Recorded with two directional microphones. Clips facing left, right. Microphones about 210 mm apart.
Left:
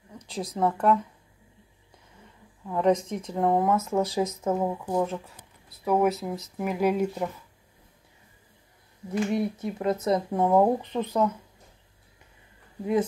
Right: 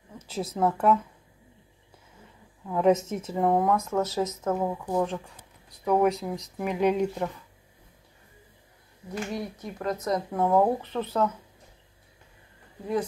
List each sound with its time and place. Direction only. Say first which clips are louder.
0.2 s speech: even; 5° right (ahead or behind)
2.6 s speech: right 1 dB; 5° right (ahead or behind)
9.3 s speech: left 6 dB; 25° left (ahead or behind)